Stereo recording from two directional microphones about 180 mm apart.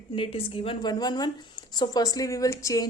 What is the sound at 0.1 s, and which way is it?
Speech, 30° left (ahead or behind).